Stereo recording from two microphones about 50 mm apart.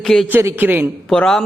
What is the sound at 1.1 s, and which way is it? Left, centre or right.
Speech, centre.